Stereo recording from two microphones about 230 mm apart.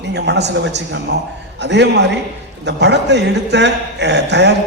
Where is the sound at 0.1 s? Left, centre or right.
Right.